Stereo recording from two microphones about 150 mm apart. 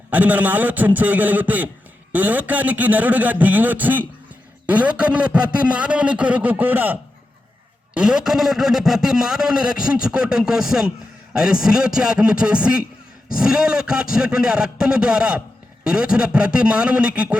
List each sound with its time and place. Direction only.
0.1 s a man's voice: 10° right (ahead or behind)